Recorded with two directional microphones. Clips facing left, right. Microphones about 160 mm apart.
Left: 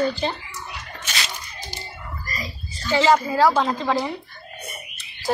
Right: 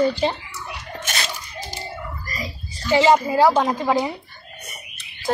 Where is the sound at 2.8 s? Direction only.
10° right (ahead or behind).